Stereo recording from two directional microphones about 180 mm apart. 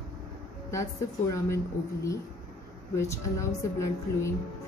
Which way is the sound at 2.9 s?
15° left (ahead or behind).